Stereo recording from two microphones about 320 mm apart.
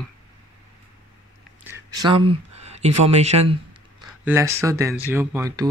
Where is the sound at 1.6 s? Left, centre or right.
Centre.